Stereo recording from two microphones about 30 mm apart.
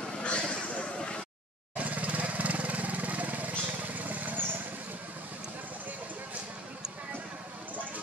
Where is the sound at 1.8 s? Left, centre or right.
Right.